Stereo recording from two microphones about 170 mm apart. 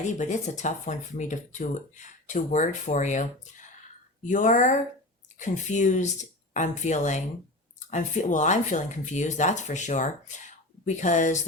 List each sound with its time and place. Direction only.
0.0 s speech: 45° left (ahead or behind)
4.3 s speech: 45° left (ahead or behind)